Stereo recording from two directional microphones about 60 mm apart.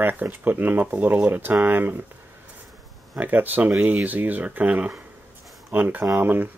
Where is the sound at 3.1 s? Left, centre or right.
Right.